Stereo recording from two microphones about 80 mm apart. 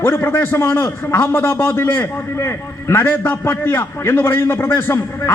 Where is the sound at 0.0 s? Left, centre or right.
Left.